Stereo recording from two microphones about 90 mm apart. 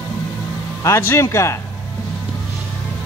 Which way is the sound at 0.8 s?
35° left (ahead or behind).